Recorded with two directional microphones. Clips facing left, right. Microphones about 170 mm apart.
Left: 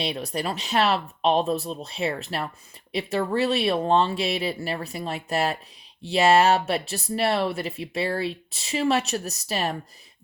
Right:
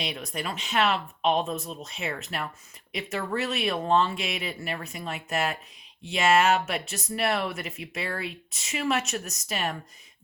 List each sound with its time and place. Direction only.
0.0 s speech: 35° left (ahead or behind)